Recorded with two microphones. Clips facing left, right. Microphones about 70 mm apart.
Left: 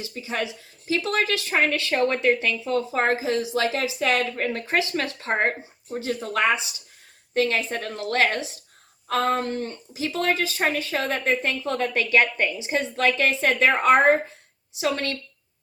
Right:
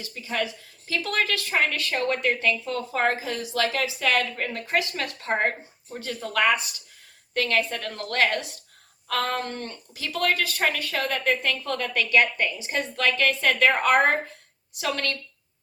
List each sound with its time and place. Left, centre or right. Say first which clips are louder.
0.0 s a woman's voice: even; left